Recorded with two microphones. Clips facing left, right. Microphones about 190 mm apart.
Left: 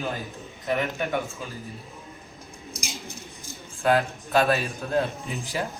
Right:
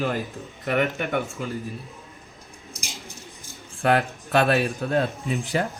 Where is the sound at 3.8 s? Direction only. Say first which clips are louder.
Right 1 dB; 65° right (ahead or behind).